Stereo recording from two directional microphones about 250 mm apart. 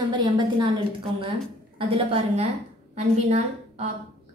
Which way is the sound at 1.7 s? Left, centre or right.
Right.